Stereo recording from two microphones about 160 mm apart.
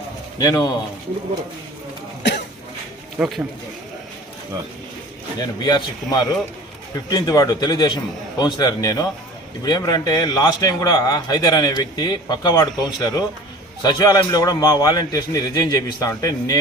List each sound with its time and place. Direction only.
0.3 s a man's voice: 20° left (ahead or behind)
3.2 s speech: centre (ahead or behind)
5.4 s a man's voice: 25° left (ahead or behind)